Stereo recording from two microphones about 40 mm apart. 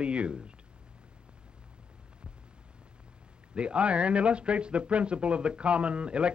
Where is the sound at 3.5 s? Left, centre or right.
Right.